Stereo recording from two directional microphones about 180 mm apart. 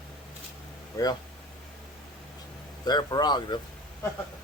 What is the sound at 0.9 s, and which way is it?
Speech, 20° left (ahead or behind).